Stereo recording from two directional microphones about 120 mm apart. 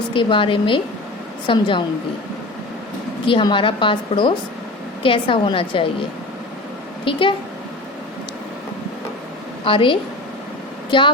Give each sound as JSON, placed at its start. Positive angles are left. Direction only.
{"t": 0.1, "sound": "a woman's voice", "side_deg": 45}
{"t": 3.2, "sound": "a woman's voice", "side_deg": 45}
{"t": 7.0, "sound": "a woman's voice", "side_deg": 45}
{"t": 9.6, "sound": "a woman's voice", "side_deg": 45}